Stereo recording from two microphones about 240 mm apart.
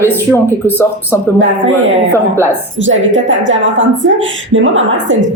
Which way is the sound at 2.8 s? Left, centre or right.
Right.